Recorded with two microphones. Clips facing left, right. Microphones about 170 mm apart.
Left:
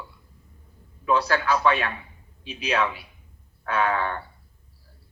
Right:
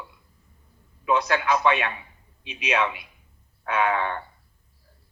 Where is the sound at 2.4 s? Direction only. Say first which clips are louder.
Left 2 dB; 35° left (ahead or behind).